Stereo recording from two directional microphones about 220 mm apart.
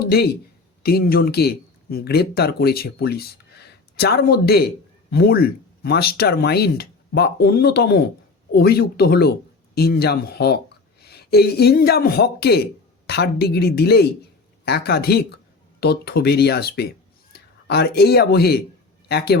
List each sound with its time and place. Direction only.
0.0 s speech: 45° left (ahead or behind)